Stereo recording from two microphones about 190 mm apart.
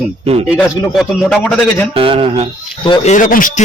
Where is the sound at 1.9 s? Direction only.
30° right (ahead or behind).